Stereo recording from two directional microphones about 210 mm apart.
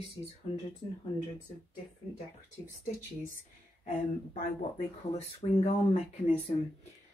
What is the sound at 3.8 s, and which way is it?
Speech, 35° left (ahead or behind).